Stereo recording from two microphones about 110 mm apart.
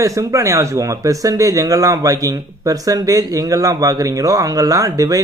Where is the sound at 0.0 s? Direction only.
30° right (ahead or behind).